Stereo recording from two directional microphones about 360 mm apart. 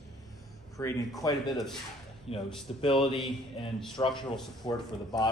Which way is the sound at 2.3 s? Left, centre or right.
Centre.